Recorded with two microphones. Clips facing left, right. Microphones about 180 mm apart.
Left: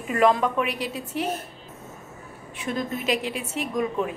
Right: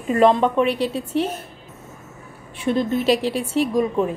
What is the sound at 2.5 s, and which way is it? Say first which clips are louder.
Speech: right 8 dB; 30° right (ahead or behind).